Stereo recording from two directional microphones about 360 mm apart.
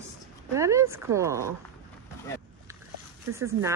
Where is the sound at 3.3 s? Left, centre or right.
Centre.